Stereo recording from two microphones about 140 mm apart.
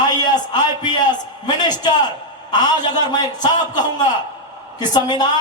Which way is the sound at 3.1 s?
30° left (ahead or behind).